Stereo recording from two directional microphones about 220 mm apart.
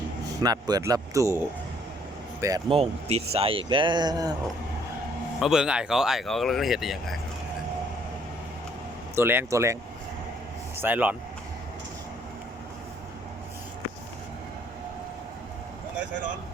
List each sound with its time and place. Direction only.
0.4 s speech: 15° right (ahead or behind)
2.4 s speech: 20° right (ahead or behind)
5.4 s speech: centre (ahead or behind)
9.1 s speech: 10° right (ahead or behind)
10.8 s speech: 10° right (ahead or behind)